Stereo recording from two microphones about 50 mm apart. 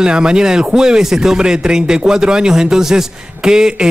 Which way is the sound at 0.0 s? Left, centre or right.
Centre.